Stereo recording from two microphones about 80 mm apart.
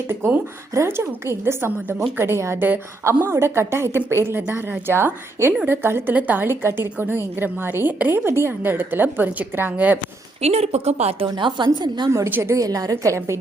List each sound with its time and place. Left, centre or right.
0.1 s a woman's voice: right
11.3 s a woman's voice: right
12.4 s a woman's voice: right